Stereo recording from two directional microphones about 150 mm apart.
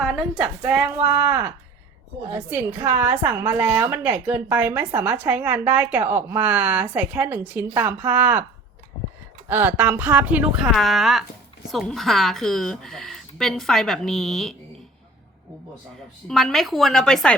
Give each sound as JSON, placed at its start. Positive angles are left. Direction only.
{"t": 0.0, "sound": "a woman's voice", "side_deg": 0}
{"t": 9.5, "sound": "a woman's voice", "side_deg": -10}
{"t": 16.3, "sound": "speech", "side_deg": 0}